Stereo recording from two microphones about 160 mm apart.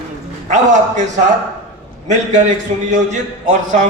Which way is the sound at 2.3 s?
50° right (ahead or behind).